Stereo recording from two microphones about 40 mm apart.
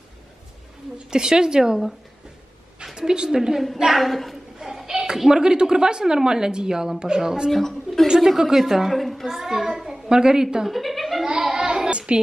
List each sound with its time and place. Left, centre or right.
0.9 s a woman's voice: centre
2.8 s a woman's voice: centre
4.6 s a sound: centre
5.0 s a woman's voice: centre
7.5 s a woman's voice: centre
8.1 s a woman's voice: centre
9.4 s a sound: centre
10.7 s music: centre
11.2 s a sound: centre